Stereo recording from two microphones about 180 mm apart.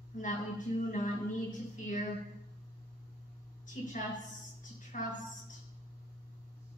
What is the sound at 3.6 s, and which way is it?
A woman's voice, 45° left (ahead or behind).